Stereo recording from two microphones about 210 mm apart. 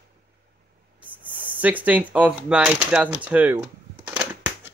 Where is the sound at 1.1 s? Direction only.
10° right (ahead or behind).